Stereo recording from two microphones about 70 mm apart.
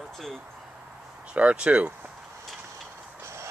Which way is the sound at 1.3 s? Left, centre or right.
Centre.